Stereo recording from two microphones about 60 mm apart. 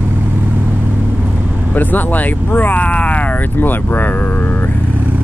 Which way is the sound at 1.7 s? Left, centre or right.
Left.